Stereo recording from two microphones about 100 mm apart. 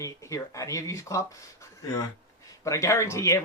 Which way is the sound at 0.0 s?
30° left (ahead or behind).